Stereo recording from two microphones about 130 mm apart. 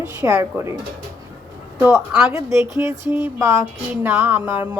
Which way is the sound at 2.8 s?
20° right (ahead or behind).